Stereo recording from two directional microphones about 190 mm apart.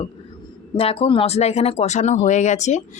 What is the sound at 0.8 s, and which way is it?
Speech, 30° left (ahead or behind).